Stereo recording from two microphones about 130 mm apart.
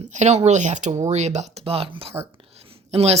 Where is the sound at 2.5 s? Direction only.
50° right (ahead or behind).